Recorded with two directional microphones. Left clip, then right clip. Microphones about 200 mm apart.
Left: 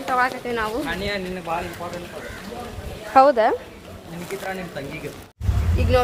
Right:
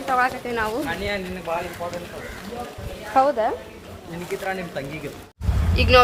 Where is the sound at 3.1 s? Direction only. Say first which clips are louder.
Left 4 dB; 40° left (ahead or behind).